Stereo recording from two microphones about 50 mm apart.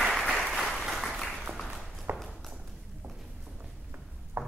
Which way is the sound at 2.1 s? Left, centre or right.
Right.